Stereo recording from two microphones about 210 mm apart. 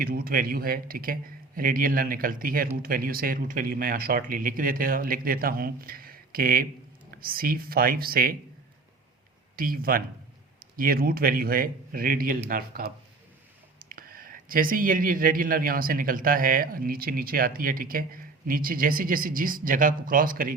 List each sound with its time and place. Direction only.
0.0 s speech: 45° right (ahead or behind)
9.6 s speech: 45° right (ahead or behind)